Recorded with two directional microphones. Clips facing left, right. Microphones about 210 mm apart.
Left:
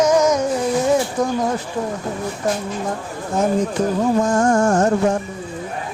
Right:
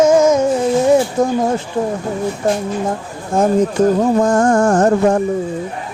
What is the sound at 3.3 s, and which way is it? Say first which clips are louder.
Speech: right 4 dB; 50° right (ahead or behind).